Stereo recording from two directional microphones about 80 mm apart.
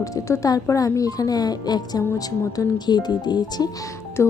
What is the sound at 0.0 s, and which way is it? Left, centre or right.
Speech, left.